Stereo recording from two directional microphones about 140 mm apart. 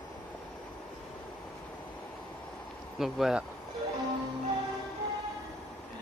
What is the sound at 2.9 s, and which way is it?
Speech, 5° right (ahead or behind).